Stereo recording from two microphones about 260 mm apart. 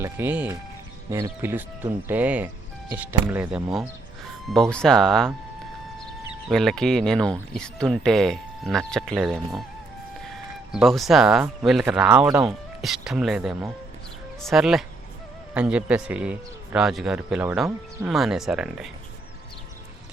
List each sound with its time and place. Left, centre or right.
0.0 s speech: centre
6.5 s speech: centre
10.7 s speech: centre